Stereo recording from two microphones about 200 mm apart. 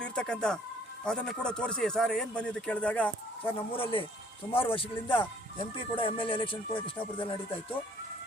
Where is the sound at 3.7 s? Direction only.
25° left (ahead or behind).